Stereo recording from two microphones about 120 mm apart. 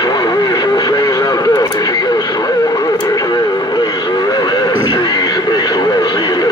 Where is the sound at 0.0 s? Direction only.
35° left (ahead or behind).